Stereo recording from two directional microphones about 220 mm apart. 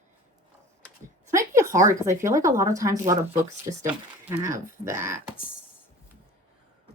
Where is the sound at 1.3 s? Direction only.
15° right (ahead or behind).